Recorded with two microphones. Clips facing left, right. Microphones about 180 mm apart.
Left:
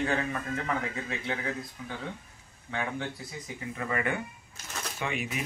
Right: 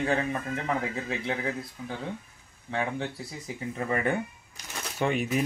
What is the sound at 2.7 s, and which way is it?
A man's voice, 30° right (ahead or behind).